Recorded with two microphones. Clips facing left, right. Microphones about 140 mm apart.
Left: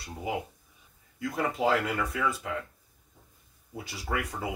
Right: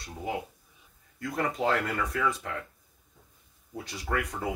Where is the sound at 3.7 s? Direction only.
5° left (ahead or behind).